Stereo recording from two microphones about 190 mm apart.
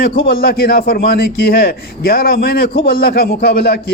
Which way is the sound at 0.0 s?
55° left (ahead or behind).